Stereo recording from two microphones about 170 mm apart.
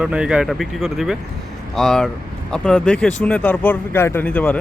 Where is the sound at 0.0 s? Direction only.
5° right (ahead or behind).